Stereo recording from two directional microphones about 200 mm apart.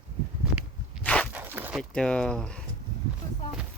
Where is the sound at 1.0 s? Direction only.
5° left (ahead or behind).